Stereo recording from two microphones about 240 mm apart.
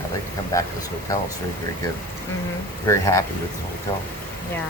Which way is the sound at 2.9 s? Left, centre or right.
Centre.